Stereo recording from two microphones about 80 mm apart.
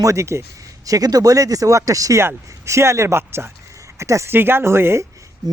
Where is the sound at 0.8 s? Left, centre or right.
Right.